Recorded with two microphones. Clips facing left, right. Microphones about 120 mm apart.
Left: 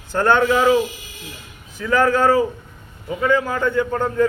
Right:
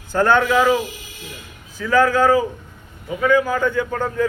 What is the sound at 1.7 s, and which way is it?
A man's voice, 25° left (ahead or behind).